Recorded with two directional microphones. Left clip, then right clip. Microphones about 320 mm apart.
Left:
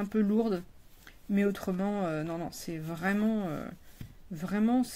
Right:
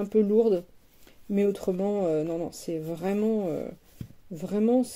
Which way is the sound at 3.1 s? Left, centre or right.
Left.